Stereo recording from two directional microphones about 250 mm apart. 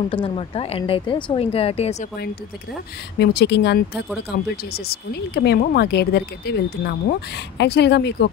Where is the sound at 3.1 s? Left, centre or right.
Left.